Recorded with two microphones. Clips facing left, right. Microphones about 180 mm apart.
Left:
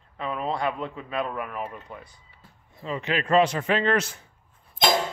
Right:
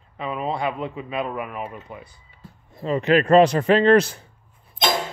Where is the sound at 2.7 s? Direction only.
40° right (ahead or behind).